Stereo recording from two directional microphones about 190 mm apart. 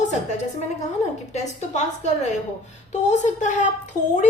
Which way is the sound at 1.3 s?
35° left (ahead or behind).